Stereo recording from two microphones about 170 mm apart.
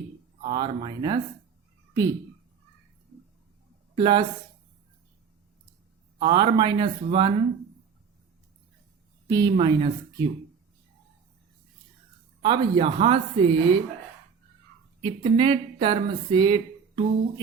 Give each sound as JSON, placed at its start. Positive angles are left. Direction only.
{"t": 0.5, "sound": "speech", "side_deg": -25}
{"t": 3.9, "sound": "speech", "side_deg": -30}
{"t": 6.1, "sound": "speech", "side_deg": -30}
{"t": 9.3, "sound": "speech", "side_deg": -25}
{"t": 12.4, "sound": "speech", "side_deg": -30}
{"t": 15.0, "sound": "speech", "side_deg": -30}